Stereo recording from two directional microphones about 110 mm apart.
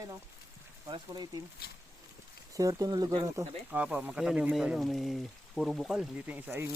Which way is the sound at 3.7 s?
15° right (ahead or behind).